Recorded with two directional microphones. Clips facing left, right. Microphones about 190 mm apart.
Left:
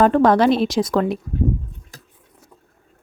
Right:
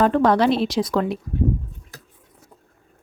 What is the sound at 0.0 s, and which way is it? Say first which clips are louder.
Speech: left 3 dB; 45° left (ahead or behind).